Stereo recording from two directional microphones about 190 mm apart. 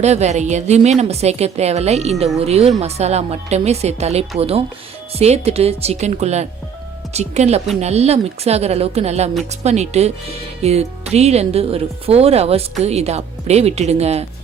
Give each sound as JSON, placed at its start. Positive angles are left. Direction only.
{"t": 0.0, "sound": "a woman's voice", "side_deg": -35}